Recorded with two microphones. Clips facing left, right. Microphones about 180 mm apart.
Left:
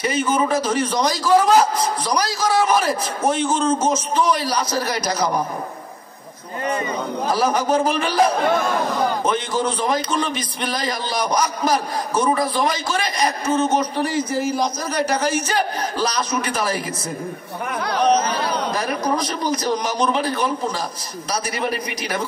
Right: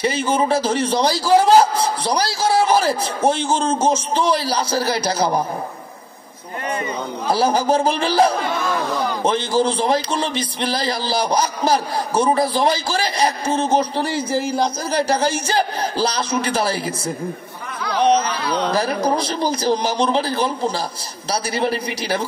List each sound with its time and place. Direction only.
0.0 s a man's voice: 30° right (ahead or behind)
7.2 s a man's voice: 30° right (ahead or behind)
18.6 s a man's voice: 30° right (ahead or behind)